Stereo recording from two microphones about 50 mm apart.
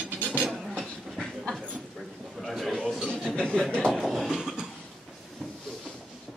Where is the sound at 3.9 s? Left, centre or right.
Centre.